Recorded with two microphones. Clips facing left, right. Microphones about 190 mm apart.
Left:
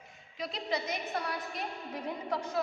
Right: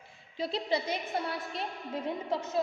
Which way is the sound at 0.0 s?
30° right (ahead or behind).